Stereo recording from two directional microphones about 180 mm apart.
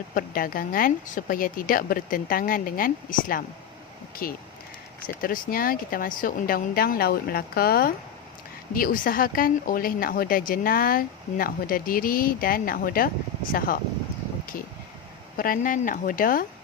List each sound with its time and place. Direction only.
0.1 s speech: 50° left (ahead or behind)
15.4 s speech: 50° left (ahead or behind)